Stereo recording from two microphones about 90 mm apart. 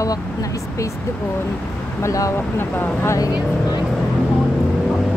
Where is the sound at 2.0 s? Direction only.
40° left (ahead or behind).